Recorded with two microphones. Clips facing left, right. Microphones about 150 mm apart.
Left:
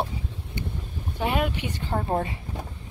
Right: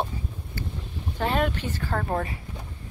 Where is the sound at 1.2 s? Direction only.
10° left (ahead or behind).